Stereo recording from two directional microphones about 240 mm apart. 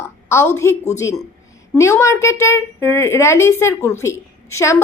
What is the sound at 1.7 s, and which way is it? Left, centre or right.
A woman's voice, centre.